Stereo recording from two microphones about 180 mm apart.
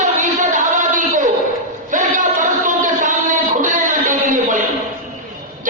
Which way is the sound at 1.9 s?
45° right (ahead or behind).